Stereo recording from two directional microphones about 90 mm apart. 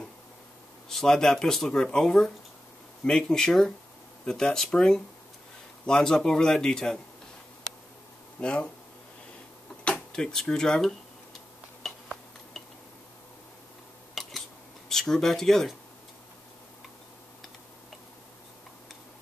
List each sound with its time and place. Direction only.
0.8 s speech: 5° left (ahead or behind)
8.4 s speech: 10° left (ahead or behind)
9.8 s speech: 5° left (ahead or behind)
11.8 s tick-tock: centre (ahead or behind)
14.2 s a sound: centre (ahead or behind)
14.9 s speech: 5° left (ahead or behind)